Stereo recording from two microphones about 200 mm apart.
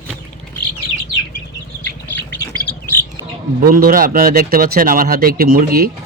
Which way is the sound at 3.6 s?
45° right (ahead or behind).